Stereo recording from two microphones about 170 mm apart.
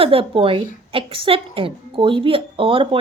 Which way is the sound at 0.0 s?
30° right (ahead or behind).